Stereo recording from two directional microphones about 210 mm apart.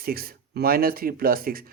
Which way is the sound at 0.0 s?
45° right (ahead or behind).